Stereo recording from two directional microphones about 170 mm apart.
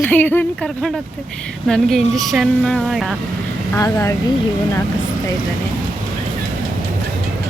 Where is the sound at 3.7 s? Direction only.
15° left (ahead or behind).